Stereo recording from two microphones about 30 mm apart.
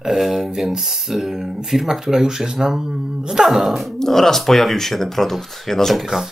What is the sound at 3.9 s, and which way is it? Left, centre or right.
Speech, centre.